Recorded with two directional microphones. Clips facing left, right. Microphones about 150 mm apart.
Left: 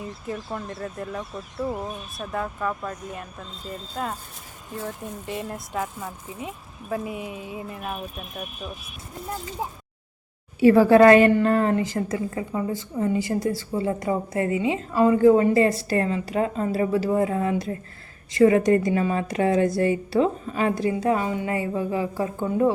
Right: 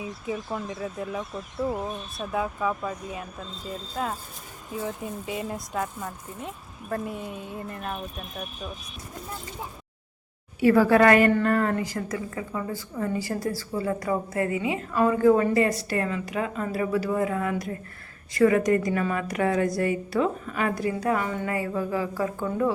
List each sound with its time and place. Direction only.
0.0 s speech: 5° right (ahead or behind)
10.6 s a woman's voice: 25° left (ahead or behind)